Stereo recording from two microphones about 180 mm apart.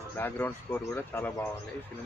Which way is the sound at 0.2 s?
10° left (ahead or behind).